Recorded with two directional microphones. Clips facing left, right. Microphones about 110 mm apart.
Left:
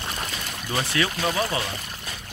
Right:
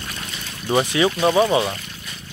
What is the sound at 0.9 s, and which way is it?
Speech, 20° right (ahead or behind).